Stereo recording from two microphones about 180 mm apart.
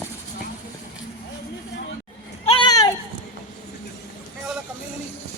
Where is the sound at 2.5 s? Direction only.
25° left (ahead or behind).